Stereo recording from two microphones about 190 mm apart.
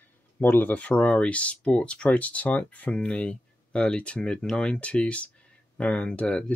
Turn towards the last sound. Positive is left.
turn(degrees=5)  # may be behind; listen again after turning